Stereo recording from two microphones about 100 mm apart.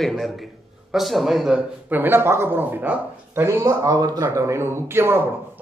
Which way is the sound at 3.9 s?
40° right (ahead or behind).